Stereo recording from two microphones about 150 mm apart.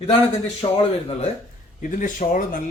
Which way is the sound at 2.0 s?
60° left (ahead or behind).